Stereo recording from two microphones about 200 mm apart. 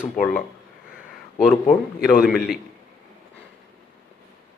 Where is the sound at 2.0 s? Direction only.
5° right (ahead or behind).